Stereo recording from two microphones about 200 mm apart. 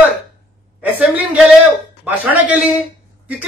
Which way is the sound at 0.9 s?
10° right (ahead or behind).